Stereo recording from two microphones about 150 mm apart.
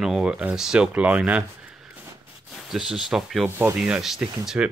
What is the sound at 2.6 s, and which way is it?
Speech, 5° right (ahead or behind).